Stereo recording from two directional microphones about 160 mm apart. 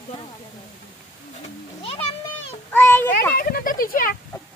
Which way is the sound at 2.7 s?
10° left (ahead or behind).